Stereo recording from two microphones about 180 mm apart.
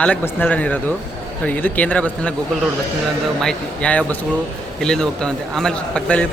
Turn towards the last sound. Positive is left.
turn(degrees=5)  # may be behind; listen again after turning